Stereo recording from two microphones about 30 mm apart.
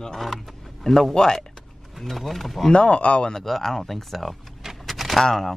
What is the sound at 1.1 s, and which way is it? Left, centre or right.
Speech, left.